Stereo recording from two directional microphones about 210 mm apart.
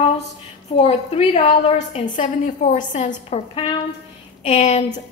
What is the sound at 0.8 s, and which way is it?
A woman's voice, 30° left (ahead or behind).